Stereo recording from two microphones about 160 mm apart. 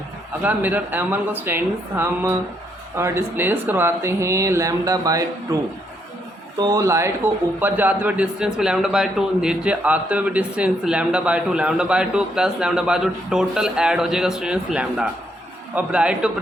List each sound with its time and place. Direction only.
0.4 s speech: 10° right (ahead or behind)
6.6 s a man's voice: 20° right (ahead or behind); by 16.3 s 5° right (ahead or behind)